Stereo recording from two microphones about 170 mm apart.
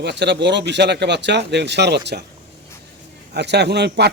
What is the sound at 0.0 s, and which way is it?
Speech, 85° right.